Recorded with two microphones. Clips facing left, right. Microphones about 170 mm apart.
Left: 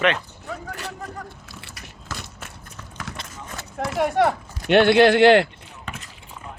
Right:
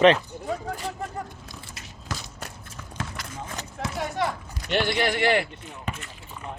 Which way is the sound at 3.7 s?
60° left (ahead or behind).